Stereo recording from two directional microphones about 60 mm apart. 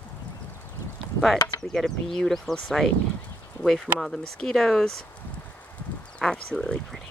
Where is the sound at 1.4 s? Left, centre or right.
Left.